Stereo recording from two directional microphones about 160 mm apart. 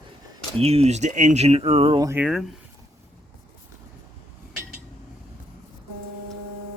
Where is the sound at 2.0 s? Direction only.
15° right (ahead or behind).